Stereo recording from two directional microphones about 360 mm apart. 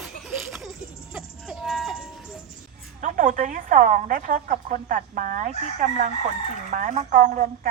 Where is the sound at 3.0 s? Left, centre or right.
Right.